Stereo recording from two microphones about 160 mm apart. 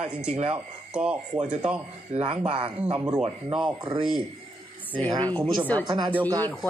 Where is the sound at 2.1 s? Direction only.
35° right (ahead or behind).